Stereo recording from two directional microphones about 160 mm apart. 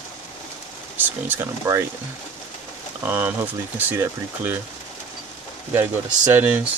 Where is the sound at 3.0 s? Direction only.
10° right (ahead or behind).